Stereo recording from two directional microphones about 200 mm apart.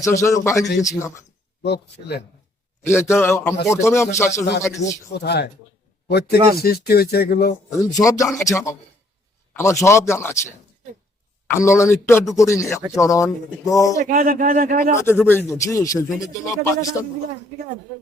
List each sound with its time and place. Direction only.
0.0 s speech: 15° left (ahead or behind)
1.6 s speech: 55° left (ahead or behind)
2.8 s speech: 15° left (ahead or behind)
5.1 s speech: 55° left (ahead or behind)
7.9 s speech: 20° left (ahead or behind)
14.0 s speech: 45° right (ahead or behind)
14.9 s speech: 15° left (ahead or behind)